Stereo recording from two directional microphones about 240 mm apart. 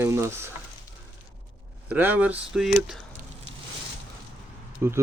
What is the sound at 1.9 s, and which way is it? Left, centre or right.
Speech, centre.